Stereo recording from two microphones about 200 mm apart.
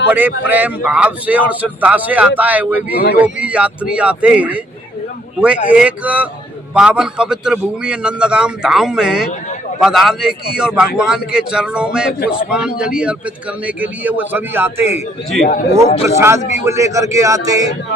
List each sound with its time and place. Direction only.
0.1 s a man's voice: 10° right (ahead or behind)
2.9 s speech: 50° left (ahead or behind)
3.2 s a man's voice: 5° right (ahead or behind)
16.0 s a man's voice: 15° right (ahead or behind)